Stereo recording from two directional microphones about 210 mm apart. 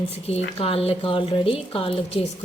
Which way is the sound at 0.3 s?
30° left (ahead or behind).